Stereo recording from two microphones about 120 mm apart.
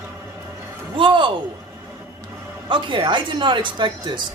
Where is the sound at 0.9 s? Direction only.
45° right (ahead or behind).